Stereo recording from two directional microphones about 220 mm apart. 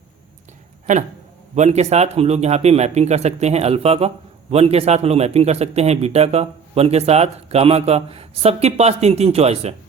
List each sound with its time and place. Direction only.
1.5 s a man's voice: 30° right (ahead or behind)